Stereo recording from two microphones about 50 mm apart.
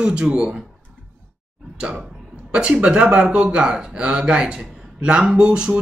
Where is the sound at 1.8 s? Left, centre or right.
Centre.